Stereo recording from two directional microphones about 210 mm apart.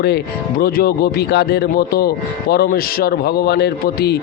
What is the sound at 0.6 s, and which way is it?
A man's voice, 45° left (ahead or behind).